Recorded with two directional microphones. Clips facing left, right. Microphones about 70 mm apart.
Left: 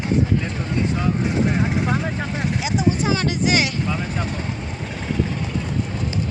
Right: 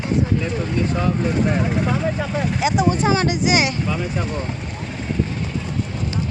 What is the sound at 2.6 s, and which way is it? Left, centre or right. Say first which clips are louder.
Speech: right 3 dB; right.